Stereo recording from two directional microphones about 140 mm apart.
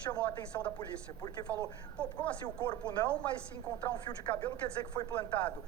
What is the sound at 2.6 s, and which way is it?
A woman's voice, 30° left (ahead or behind).